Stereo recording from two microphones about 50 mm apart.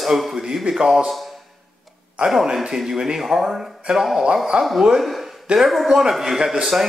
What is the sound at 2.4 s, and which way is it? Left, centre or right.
A man's voice, centre.